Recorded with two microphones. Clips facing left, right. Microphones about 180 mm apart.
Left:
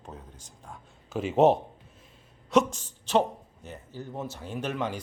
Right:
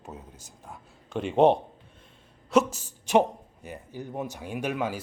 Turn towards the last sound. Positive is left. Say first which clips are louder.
# right 2 dB
turn(degrees=-10)  # may be behind; listen again after turning